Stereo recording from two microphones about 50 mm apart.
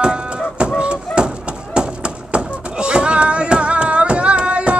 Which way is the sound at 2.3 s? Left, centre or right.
Right.